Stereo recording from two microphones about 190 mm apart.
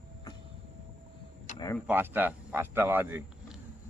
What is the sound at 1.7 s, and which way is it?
Speech, 10° right (ahead or behind).